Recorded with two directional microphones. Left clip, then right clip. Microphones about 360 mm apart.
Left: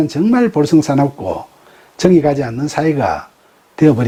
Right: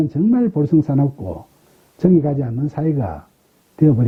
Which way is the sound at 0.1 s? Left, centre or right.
Centre.